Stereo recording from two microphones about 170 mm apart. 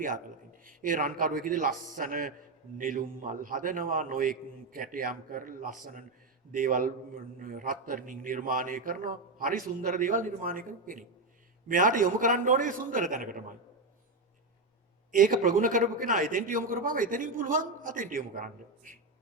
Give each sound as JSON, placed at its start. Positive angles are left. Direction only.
{"t": 0.6, "sound": "a man's voice", "side_deg": -50}
{"t": 15.1, "sound": "a man's voice", "side_deg": -50}